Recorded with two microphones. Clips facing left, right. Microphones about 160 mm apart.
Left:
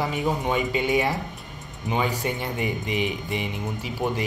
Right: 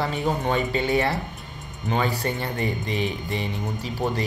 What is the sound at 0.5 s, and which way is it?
Speech, 10° left (ahead or behind).